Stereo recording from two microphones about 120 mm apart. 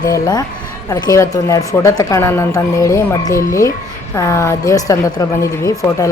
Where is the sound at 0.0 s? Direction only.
30° left (ahead or behind).